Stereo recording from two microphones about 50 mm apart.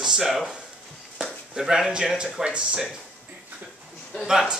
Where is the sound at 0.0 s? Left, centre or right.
Centre.